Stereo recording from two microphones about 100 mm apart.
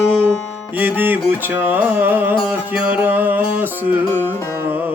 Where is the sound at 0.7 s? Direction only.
20° right (ahead or behind).